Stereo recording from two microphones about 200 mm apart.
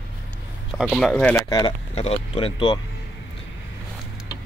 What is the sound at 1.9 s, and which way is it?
Speech, 30° left (ahead or behind).